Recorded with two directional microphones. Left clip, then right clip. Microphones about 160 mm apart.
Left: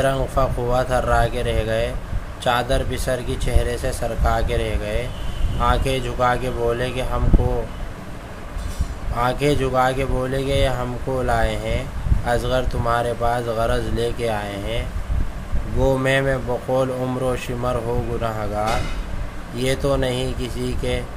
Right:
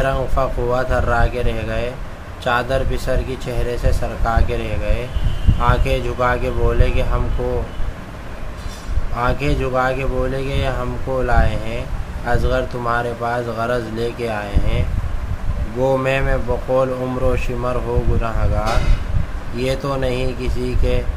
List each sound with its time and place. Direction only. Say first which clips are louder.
0.0 s speech: right 1 dB; 20° left (ahead or behind)
9.1 s speech: left 1 dB; 20° left (ahead or behind)